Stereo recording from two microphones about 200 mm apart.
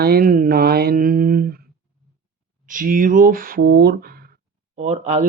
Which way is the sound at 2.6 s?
45° right (ahead or behind).